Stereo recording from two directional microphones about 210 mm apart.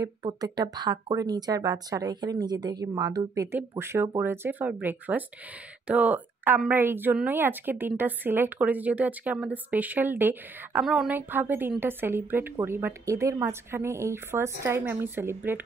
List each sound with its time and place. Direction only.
0.0 s speech: 20° right (ahead or behind)